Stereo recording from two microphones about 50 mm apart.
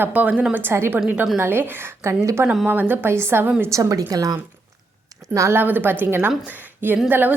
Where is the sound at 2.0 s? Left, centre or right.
Right.